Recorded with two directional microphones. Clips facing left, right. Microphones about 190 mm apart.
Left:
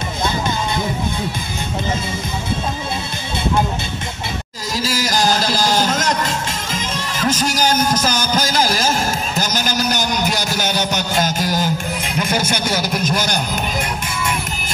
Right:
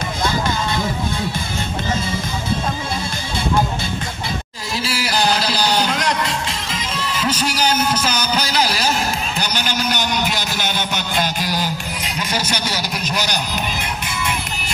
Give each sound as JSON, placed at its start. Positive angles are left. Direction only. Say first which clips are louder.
{"t": 4.7, "sound": "music", "louder": "left 2 dB", "side_deg": 40}